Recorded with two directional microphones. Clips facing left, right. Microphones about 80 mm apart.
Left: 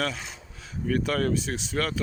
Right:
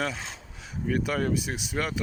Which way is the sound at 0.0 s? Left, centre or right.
Centre.